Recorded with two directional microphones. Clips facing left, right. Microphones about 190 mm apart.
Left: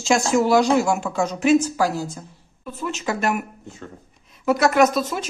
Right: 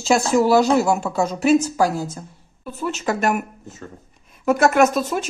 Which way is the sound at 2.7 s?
45° right (ahead or behind).